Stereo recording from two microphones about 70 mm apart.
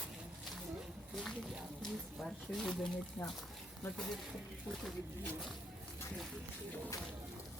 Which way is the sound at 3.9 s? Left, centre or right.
Centre.